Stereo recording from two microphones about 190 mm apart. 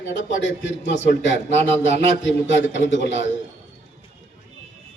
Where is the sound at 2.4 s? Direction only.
75° left (ahead or behind).